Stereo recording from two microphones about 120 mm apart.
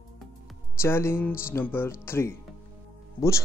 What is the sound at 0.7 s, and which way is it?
Speech, 20° left (ahead or behind).